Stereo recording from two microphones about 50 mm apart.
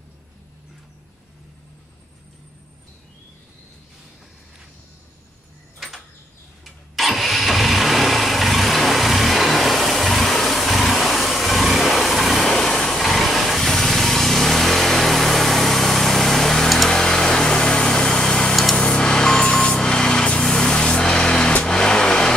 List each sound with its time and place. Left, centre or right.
6.6 s vehicle: centre